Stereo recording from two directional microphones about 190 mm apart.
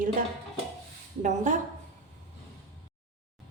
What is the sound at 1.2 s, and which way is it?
Speech, 40° right (ahead or behind).